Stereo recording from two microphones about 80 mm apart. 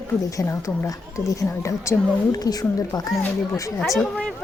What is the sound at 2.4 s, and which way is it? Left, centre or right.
Speech, left.